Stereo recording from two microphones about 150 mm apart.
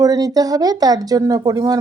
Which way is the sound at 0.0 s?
25° right (ahead or behind).